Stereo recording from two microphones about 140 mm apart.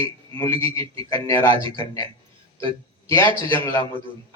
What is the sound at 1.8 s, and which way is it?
Speech, 25° left (ahead or behind).